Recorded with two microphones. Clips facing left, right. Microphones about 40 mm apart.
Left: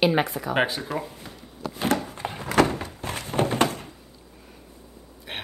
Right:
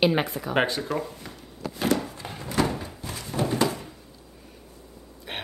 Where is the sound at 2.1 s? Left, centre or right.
Left.